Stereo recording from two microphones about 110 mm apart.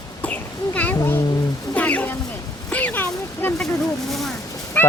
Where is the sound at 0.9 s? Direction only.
25° left (ahead or behind).